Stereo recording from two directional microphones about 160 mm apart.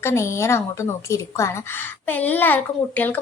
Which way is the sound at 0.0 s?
15° left (ahead or behind).